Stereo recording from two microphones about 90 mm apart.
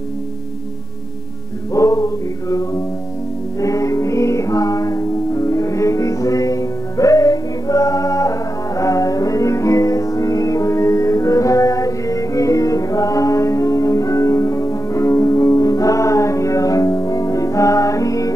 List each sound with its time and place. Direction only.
1.7 s male singing: 40° left (ahead or behind)
3.5 s music: 35° left (ahead or behind)